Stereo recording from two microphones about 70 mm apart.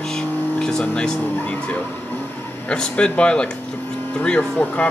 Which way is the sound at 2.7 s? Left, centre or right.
Centre.